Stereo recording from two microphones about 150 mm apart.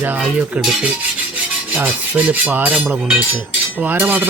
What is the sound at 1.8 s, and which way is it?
Speech, 10° right (ahead or behind).